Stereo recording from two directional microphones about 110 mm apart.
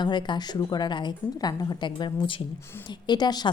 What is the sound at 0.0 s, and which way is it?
A woman's voice, 45° left (ahead or behind).